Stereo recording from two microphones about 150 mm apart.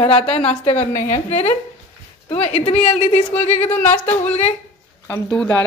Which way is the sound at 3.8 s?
10° left (ahead or behind).